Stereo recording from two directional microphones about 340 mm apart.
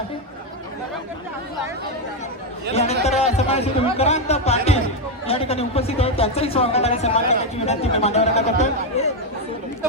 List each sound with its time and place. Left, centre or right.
2.7 s speech: centre